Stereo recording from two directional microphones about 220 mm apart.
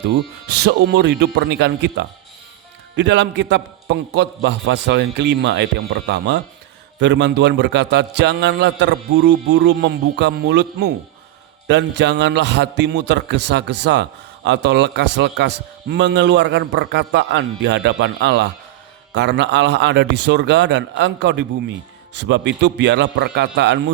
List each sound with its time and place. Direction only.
0.4 s a man's voice: 50° right (ahead or behind)